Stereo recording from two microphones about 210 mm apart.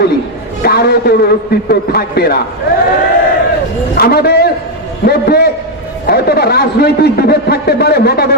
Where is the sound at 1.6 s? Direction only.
50° left (ahead or behind).